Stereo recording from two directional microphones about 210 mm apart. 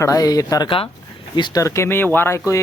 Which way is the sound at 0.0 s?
15° left (ahead or behind).